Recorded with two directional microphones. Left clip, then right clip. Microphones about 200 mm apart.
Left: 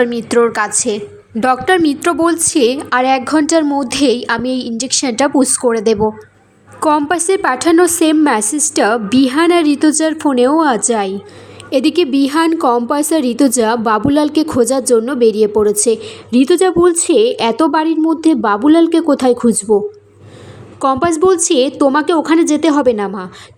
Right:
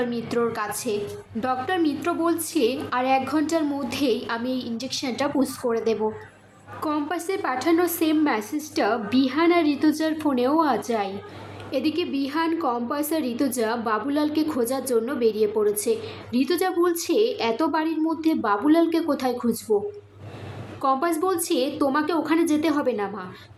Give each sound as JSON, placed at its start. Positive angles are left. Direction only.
{"t": 0.0, "sound": "a woman's voice", "side_deg": 45}
{"t": 20.8, "sound": "a woman's voice", "side_deg": 40}